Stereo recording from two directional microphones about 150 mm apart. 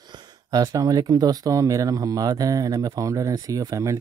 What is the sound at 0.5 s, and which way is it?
Speech, 25° right (ahead or behind).